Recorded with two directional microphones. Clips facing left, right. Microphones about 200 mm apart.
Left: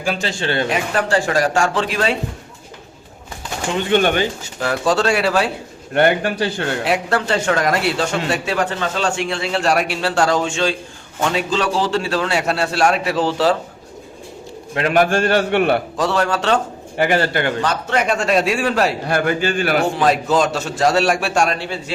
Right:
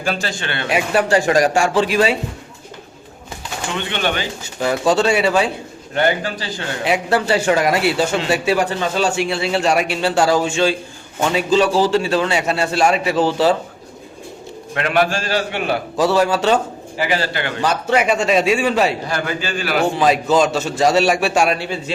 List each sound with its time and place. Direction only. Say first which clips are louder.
0.0 s speech: even; 10° left (ahead or behind)
0.3 s speech: left 5 dB; 30° left (ahead or behind)
0.7 s speech: right 2 dB; 15° right (ahead or behind)
3.8 s a man's voice: left 7 dB; 45° left (ahead or behind)
4.6 s a man's voice: right 2 dB; centre (ahead or behind)
5.9 s a man's voice: left 3 dB; 60° left (ahead or behind)
6.8 s a man's voice: right 4 dB; centre (ahead or behind)
14.8 s a man's voice: left 3 dB; 40° left (ahead or behind); by 15.8 s 60° left (ahead or behind)
16.0 s a man's voice: right 3 dB; 5° right (ahead or behind)
17.0 s a man's voice: left 4 dB; 55° left (ahead or behind)
17.6 s a man's voice: right 2 dB; 10° right (ahead or behind)
19.0 s a man's voice: left 5 dB; 50° left (ahead or behind)
20.0 s a man's voice: right 1 dB; centre (ahead or behind)